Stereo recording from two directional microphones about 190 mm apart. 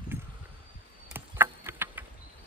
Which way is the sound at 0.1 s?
10° right (ahead or behind).